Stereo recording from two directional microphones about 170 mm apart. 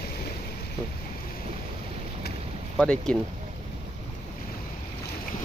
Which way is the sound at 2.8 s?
5° left (ahead or behind).